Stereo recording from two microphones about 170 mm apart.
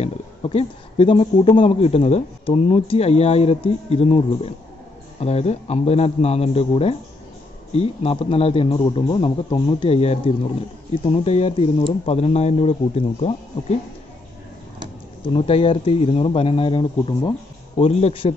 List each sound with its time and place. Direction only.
0.0 s speech: 35° left (ahead or behind)
15.3 s speech: 35° left (ahead or behind)